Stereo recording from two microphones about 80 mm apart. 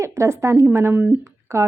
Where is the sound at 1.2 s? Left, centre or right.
Right.